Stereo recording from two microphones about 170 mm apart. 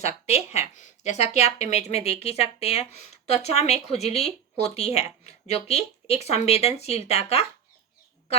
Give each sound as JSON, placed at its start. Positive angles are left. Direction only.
{"t": 0.0, "sound": "speech", "side_deg": 40}